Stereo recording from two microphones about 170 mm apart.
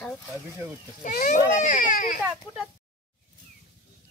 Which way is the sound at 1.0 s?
50° left (ahead or behind).